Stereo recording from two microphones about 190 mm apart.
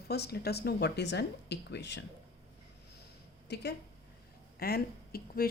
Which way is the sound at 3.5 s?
60° left (ahead or behind).